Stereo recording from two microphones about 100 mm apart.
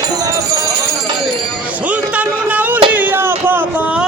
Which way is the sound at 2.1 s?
15° right (ahead or behind).